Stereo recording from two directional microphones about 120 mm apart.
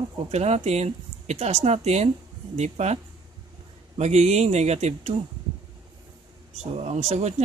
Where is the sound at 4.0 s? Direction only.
70° right (ahead or behind).